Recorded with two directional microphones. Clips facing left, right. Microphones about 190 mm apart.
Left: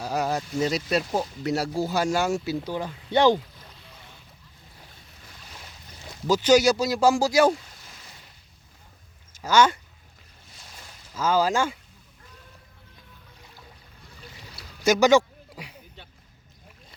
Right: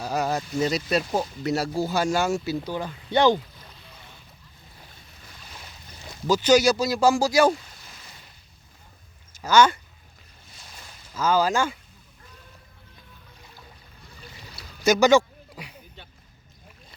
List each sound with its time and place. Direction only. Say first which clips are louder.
0.0 s speech: right 1 dB; 10° left (ahead or behind)
2.6 s speech: even; 25° left (ahead or behind)
6.2 s speech: even; 30° left (ahead or behind)
9.3 s speech: right 1 dB; 25° left (ahead or behind)
11.1 s speech: right 1 dB; 25° left (ahead or behind)
14.8 s speech: right 1 dB; 15° left (ahead or behind)